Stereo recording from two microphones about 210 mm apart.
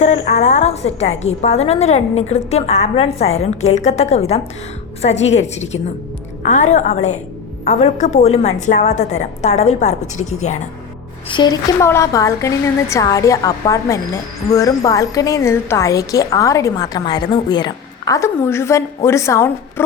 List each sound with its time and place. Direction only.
0.4 s a woman's voice: 30° left (ahead or behind)
11.3 s a woman's voice: 20° left (ahead or behind)